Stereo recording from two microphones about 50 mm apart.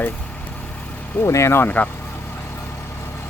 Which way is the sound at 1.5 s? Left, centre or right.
Left.